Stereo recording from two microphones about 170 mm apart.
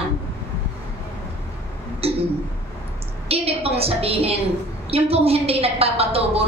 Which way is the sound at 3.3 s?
35° right (ahead or behind).